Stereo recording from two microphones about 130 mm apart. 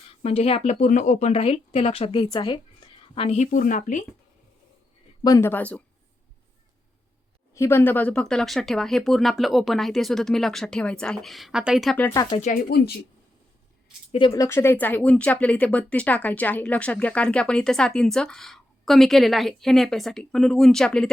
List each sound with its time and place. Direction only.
0.2 s speech: 50° left (ahead or behind)
2.3 s a sound: 40° left (ahead or behind)
3.2 s speech: 60° left (ahead or behind)
5.4 s speech: 15° left (ahead or behind)
7.5 s speech: 20° left (ahead or behind); by 11.9 s centre (ahead or behind)
12.1 s speech: 30° left (ahead or behind)
14.1 s speech: 40° left (ahead or behind)
14.3 s speech: 20° left (ahead or behind); by 21.1 s 5° left (ahead or behind)